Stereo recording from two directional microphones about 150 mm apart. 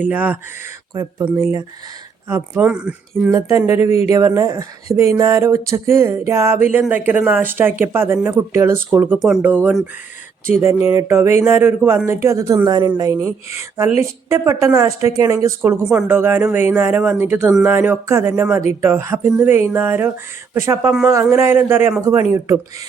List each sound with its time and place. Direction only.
0.0 s speech: 10° right (ahead or behind)
1.4 s speech: 20° right (ahead or behind)
3.6 s speech: 15° right (ahead or behind)
9.1 s speech: centre (ahead or behind); by 22.5 s 20° right (ahead or behind)